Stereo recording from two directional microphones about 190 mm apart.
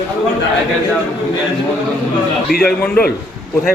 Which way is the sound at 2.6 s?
5° left (ahead or behind).